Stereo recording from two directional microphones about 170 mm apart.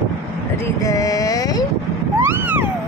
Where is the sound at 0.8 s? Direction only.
20° left (ahead or behind).